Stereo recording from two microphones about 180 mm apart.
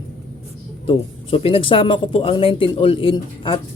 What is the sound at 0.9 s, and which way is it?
Speech, 30° left (ahead or behind).